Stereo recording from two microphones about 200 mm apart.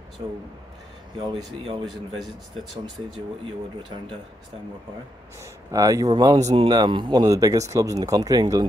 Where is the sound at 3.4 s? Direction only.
25° right (ahead or behind).